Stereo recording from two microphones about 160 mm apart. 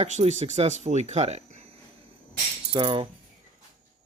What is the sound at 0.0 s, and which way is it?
Speech, 45° right (ahead or behind).